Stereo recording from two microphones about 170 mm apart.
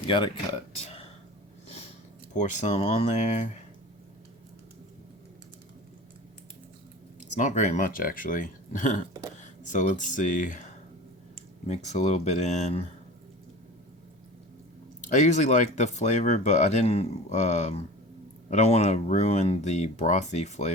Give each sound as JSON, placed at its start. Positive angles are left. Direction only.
{"t": 0.0, "sound": "speech", "side_deg": 30}
{"t": 2.3, "sound": "speech", "side_deg": 45}
{"t": 7.3, "sound": "speech", "side_deg": 45}
{"t": 11.7, "sound": "speech", "side_deg": 40}
{"t": 15.1, "sound": "speech", "side_deg": 45}